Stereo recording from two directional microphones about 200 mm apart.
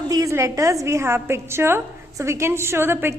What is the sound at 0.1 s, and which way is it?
A woman's voice, 15° right (ahead or behind).